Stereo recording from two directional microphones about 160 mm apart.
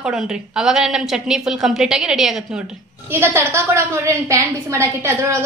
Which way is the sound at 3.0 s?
15° right (ahead or behind).